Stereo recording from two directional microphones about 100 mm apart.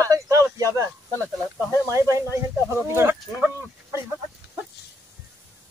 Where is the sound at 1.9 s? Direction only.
30° right (ahead or behind).